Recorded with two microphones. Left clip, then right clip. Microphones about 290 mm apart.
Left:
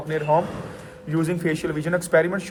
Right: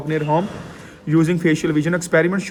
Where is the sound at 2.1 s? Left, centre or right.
Right.